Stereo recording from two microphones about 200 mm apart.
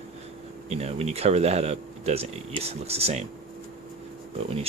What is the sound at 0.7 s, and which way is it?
Speech, 30° right (ahead or behind).